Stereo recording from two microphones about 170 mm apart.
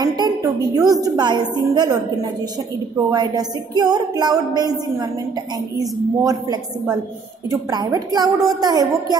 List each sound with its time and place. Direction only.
0.0 s a woman's voice: 25° right (ahead or behind)
3.1 s speech: 25° right (ahead or behind)
5.8 s speech: 20° right (ahead or behind)
7.7 s speech: 25° right (ahead or behind)